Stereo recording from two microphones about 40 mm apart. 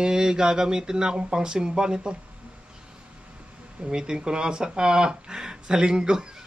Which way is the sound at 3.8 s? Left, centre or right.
Right.